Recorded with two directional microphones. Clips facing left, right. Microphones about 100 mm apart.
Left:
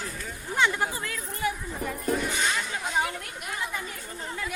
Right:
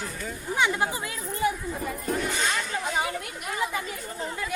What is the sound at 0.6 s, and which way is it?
Speech, 15° right (ahead or behind).